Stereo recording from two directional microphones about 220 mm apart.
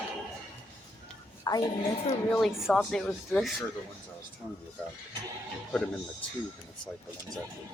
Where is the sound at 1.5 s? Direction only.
15° left (ahead or behind).